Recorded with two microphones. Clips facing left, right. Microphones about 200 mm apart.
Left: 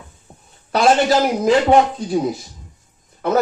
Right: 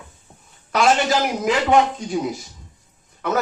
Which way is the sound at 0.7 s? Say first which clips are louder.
Left 3 dB; 35° left (ahead or behind).